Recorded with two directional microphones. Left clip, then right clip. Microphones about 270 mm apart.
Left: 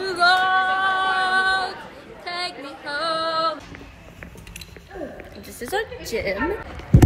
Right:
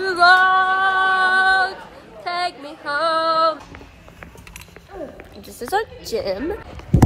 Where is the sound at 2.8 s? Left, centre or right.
Centre.